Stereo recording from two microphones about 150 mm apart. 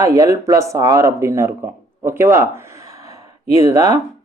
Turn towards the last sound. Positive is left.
turn(degrees=-25)  # may be behind; listen again after turning